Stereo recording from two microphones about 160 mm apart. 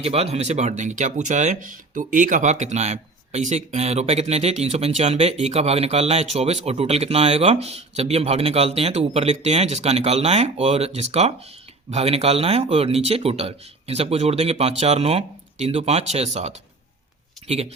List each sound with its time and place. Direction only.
0.0 s speech: 40° right (ahead or behind)